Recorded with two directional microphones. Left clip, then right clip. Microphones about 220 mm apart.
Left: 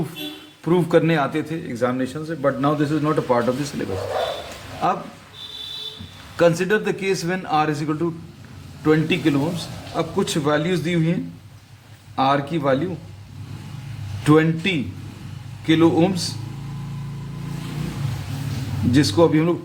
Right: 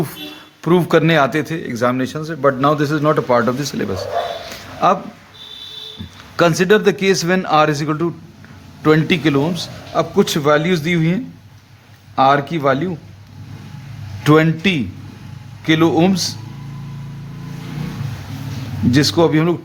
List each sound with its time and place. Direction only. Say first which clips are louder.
0.6 s a man's voice: right 4 dB; 45° right (ahead or behind)
4.8 s a man's voice: right 7 dB; 40° right (ahead or behind)
6.3 s a man's voice: right 5 dB; 40° right (ahead or behind)
14.3 s a man's voice: right 4 dB; 35° right (ahead or behind)
18.9 s a man's voice: right 3 dB; 40° right (ahead or behind)